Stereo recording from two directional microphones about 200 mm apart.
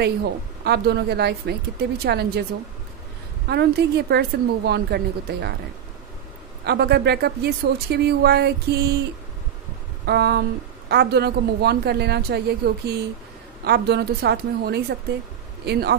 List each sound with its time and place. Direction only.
0.0 s a woman's voice: 55° right (ahead or behind)
3.4 s a woman's voice: 55° right (ahead or behind)
6.6 s a woman's voice: 55° right (ahead or behind)
10.0 s a woman's voice: 55° right (ahead or behind)